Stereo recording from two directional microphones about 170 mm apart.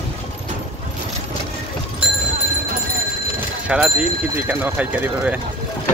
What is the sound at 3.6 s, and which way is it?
Speech, 5° right (ahead or behind).